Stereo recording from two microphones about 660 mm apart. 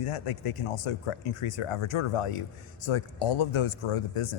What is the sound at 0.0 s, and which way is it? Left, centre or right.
Speech, left.